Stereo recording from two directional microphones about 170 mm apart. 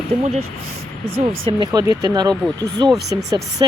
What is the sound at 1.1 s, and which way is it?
Speech, 30° right (ahead or behind).